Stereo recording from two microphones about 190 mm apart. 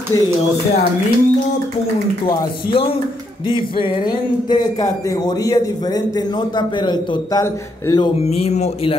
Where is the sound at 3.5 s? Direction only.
25° left (ahead or behind).